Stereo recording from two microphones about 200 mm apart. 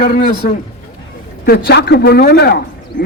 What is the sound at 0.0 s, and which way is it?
Speech, 50° left (ahead or behind).